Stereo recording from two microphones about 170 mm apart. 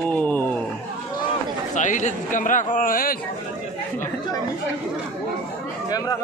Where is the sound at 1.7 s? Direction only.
45° left (ahead or behind).